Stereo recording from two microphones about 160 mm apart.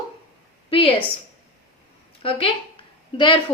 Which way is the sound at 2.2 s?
35° left (ahead or behind).